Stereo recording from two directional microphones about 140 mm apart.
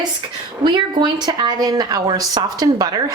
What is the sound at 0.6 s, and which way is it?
A woman's voice, 30° right (ahead or behind).